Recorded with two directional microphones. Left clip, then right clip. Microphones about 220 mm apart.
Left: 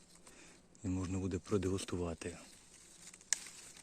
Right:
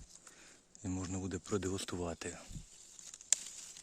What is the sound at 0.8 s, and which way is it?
Speech, 15° right (ahead or behind).